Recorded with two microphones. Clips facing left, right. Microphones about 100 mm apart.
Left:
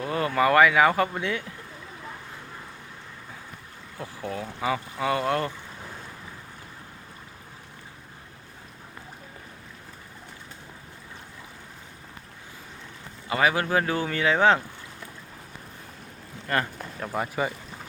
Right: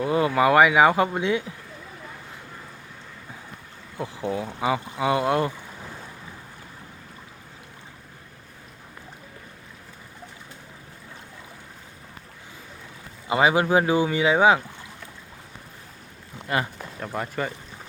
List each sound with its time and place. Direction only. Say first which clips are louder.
0.0 s speech: right 3 dB; 15° right (ahead or behind)
3.9 s speech: right 5 dB; 20° right (ahead or behind)
13.2 s speech: right 4 dB; 20° right (ahead or behind)
16.5 s speech: right 1 dB; 10° right (ahead or behind)
17.0 s speech: left 1 dB; 5° left (ahead or behind)